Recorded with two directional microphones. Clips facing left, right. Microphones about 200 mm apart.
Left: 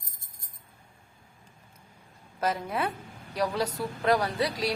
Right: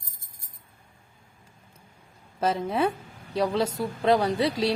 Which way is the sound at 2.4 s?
25° right (ahead or behind).